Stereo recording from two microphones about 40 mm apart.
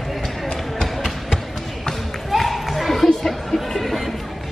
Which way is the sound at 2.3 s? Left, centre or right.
Centre.